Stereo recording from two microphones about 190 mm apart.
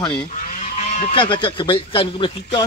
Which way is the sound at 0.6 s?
40° left (ahead or behind).